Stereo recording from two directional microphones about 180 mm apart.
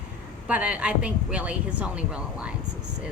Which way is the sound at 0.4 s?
5° right (ahead or behind).